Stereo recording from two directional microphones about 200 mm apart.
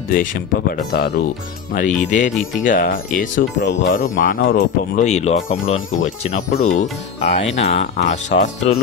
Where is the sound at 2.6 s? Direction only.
45° left (ahead or behind).